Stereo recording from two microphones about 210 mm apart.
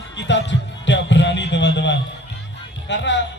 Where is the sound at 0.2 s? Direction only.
60° left (ahead or behind).